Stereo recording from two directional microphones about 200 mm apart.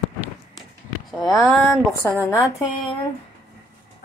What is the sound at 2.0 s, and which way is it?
Speech, 10° left (ahead or behind).